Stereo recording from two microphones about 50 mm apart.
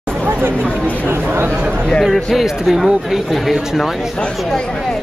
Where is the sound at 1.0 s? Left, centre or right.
Right.